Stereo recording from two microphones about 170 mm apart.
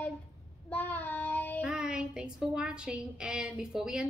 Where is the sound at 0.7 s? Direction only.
10° left (ahead or behind).